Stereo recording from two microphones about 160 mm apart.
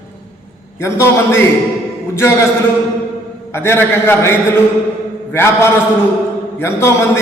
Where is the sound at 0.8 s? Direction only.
15° left (ahead or behind).